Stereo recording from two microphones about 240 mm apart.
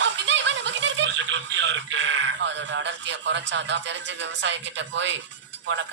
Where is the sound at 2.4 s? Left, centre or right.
Right.